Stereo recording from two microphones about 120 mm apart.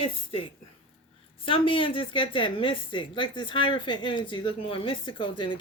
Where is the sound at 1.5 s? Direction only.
45° left (ahead or behind).